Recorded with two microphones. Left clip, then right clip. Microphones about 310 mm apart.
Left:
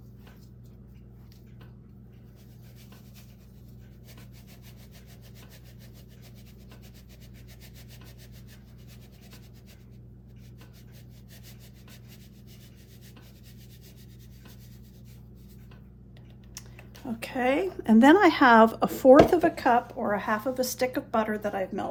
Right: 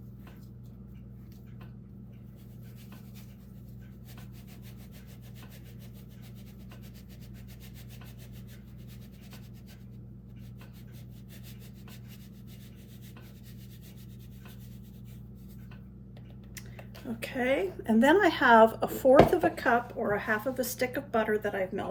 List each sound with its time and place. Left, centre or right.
17.2 s a woman's voice: centre